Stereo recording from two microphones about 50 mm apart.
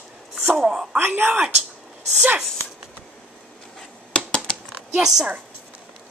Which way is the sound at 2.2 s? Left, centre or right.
Right.